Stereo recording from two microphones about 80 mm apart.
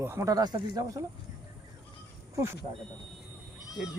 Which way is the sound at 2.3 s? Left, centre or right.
Right.